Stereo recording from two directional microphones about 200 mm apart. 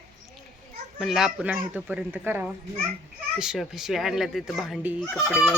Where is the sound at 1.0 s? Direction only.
Centre (ahead or behind).